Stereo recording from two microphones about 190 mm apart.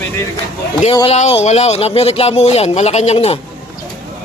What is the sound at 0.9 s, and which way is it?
Speech, 30° left (ahead or behind).